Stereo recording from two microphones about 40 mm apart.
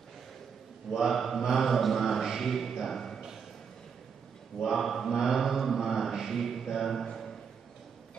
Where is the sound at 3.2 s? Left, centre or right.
Centre.